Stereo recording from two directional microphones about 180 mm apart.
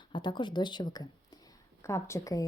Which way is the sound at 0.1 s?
25° left (ahead or behind).